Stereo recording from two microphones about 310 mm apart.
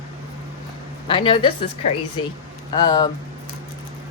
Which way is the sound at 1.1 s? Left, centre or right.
Centre.